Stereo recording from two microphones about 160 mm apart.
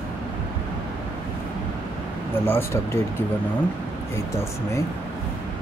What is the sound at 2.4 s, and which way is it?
Speech, 15° left (ahead or behind).